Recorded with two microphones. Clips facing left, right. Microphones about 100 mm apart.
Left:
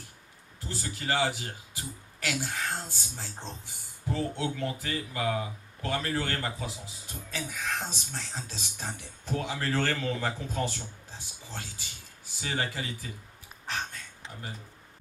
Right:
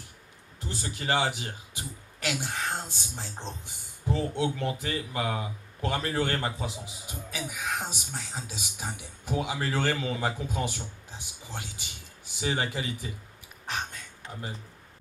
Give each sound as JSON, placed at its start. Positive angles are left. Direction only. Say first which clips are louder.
{"t": 0.6, "sound": "speech", "louder": "right 1 dB", "side_deg": -20}